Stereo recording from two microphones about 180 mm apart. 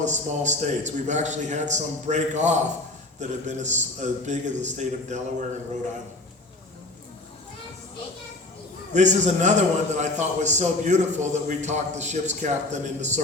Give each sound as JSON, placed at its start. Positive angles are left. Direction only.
{"t": 0.0, "sound": "a man's voice", "side_deg": -40}
{"t": 9.0, "sound": "a man's voice", "side_deg": -40}